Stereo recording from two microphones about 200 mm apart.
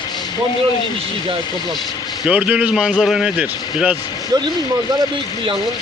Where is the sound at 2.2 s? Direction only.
5° right (ahead or behind).